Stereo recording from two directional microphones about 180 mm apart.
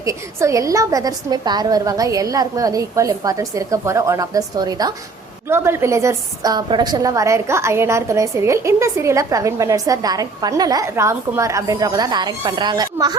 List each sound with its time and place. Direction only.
0.0 s a woman's voice: 15° right (ahead or behind)